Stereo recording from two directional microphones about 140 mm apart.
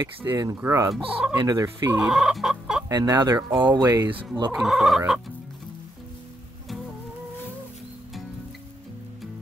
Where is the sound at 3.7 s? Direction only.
30° right (ahead or behind).